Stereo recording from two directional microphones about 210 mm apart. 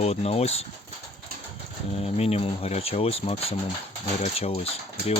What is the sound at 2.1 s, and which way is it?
Speech, 30° left (ahead or behind).